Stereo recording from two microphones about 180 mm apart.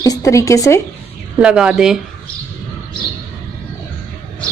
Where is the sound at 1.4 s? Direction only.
5° right (ahead or behind).